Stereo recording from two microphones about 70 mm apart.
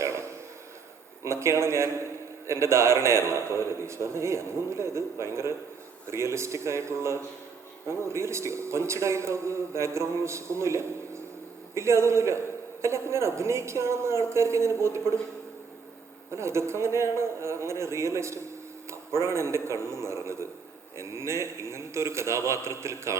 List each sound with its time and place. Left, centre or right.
0.0 s a sound: right
1.2 s a man's voice: right
16.3 s a man's voice: right